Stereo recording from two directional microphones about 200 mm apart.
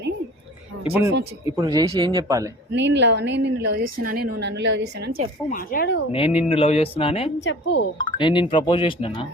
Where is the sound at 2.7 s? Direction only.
60° right (ahead or behind); by 4.2 s 45° right (ahead or behind).